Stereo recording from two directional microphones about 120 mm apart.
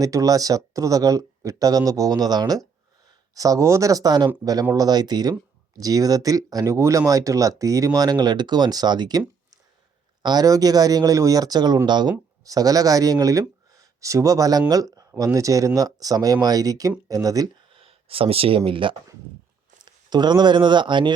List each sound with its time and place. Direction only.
0.0 s speech: 30° right (ahead or behind)
10.2 s speech: 30° right (ahead or behind)
17.7 s speech: 50° right (ahead or behind)